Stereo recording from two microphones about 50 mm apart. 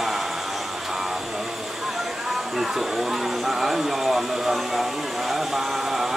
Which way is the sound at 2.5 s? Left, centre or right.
Centre.